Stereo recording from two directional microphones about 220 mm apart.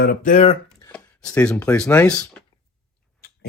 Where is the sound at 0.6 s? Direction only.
5° left (ahead or behind).